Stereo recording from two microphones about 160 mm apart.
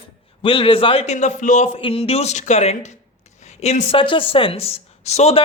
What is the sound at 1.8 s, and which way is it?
Speech, 35° left (ahead or behind).